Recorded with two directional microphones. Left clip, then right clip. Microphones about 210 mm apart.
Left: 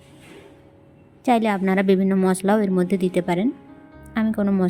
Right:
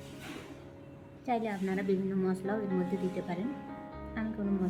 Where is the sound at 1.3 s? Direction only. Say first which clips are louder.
Left 14 dB; 50° left (ahead or behind).